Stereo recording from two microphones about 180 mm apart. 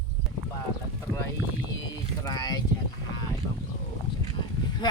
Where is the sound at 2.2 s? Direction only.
20° left (ahead or behind).